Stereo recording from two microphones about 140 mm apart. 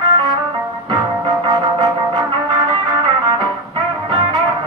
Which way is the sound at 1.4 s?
30° right (ahead or behind).